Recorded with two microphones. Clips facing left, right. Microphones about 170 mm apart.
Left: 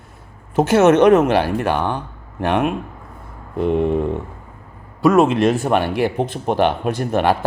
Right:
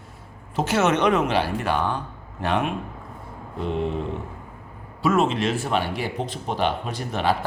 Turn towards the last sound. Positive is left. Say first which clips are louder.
# left 7 dB
turn(degrees=55)  # may be behind; listen again after turning